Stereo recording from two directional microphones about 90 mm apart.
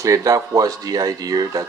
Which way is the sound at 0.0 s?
40° right (ahead or behind).